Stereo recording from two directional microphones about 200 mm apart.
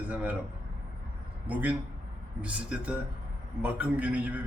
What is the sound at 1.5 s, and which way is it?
A man's voice, 5° right (ahead or behind).